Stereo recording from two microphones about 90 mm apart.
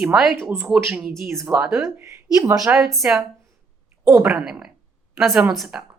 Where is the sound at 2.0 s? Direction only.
35° right (ahead or behind).